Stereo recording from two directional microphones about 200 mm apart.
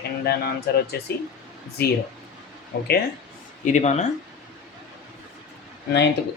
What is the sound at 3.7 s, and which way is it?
Speech, 35° left (ahead or behind).